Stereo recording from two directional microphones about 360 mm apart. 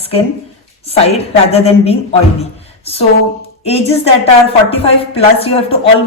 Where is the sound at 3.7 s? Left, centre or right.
Centre.